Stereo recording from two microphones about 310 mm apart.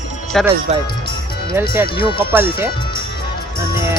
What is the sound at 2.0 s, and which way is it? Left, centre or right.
Speech, centre.